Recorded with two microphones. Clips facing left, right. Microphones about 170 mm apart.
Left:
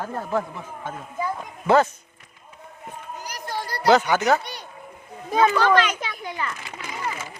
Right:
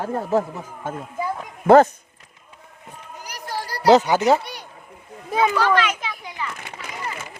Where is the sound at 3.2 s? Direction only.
10° right (ahead or behind).